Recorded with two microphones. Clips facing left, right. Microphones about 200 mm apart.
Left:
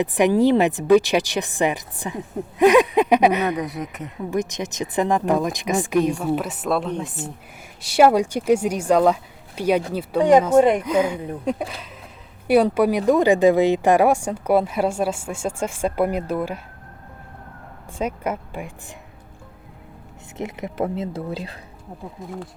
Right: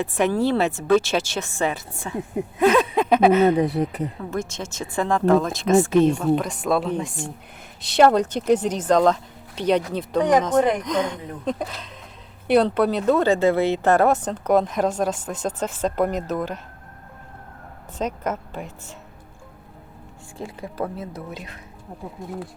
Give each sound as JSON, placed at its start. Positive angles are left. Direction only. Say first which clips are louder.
{"t": 0.0, "sound": "speech", "louder": "left 4 dB", "side_deg": 15}
{"t": 3.5, "sound": "speech", "louder": "right 6 dB", "side_deg": -30}
{"t": 4.2, "sound": "speech", "louder": "left 4 dB", "side_deg": 15}
{"t": 10.6, "sound": "speech", "louder": "left 4 dB", "side_deg": 25}
{"t": 10.8, "sound": "speech", "louder": "left 4 dB", "side_deg": 10}
{"t": 17.9, "sound": "speech", "louder": "left 1 dB", "side_deg": 10}
{"t": 20.3, "sound": "speech", "louder": "left 4 dB", "side_deg": 20}
{"t": 22.2, "sound": "speech", "louder": "right 1 dB", "side_deg": 0}